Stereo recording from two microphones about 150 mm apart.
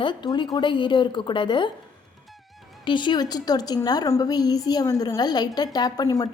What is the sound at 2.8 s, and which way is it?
A woman's voice, 30° left (ahead or behind).